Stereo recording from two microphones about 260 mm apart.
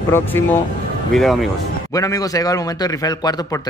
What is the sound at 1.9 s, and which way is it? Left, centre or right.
A man's voice, centre.